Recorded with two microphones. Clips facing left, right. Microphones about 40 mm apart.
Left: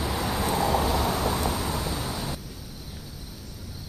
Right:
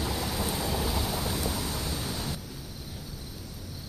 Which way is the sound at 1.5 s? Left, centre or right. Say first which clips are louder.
Left 4 dB; left.